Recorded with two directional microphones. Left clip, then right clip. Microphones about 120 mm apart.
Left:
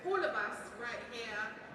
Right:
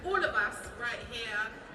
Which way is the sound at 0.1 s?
40° right (ahead or behind).